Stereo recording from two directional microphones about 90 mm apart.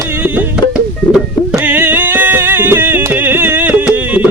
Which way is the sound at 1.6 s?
20° right (ahead or behind).